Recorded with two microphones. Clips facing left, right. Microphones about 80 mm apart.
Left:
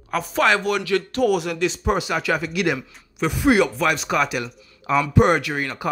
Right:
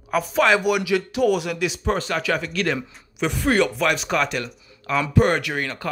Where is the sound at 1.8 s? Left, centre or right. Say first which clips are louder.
Even; centre.